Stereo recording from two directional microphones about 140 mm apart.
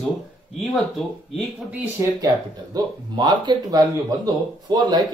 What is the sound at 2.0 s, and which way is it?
Speech, 25° right (ahead or behind).